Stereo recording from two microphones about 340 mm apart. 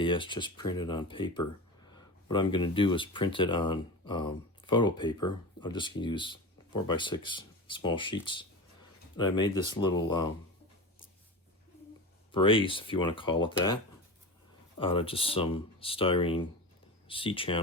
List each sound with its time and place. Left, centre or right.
0.0 s speech: centre
12.3 s speech: centre
14.8 s speech: centre